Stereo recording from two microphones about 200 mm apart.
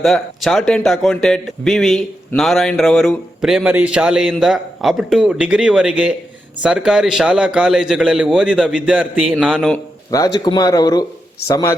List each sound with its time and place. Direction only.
0.0 s a man's voice: centre (ahead or behind)
10.1 s a man's voice: 15° left (ahead or behind)